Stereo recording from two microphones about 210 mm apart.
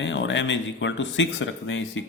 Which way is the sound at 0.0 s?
60° left (ahead or behind).